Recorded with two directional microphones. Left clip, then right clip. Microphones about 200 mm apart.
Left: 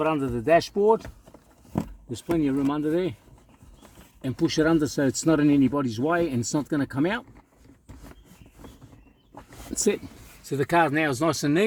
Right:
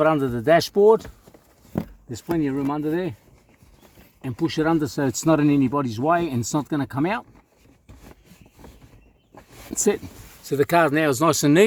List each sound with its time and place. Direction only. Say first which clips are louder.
0.0 s speech: right 5 dB; 60° right (ahead or behind)
2.0 s speech: right 1 dB; 40° right (ahead or behind)
4.2 s speech: even; 35° right (ahead or behind)
10.4 s speech: right 4 dB; 55° right (ahead or behind)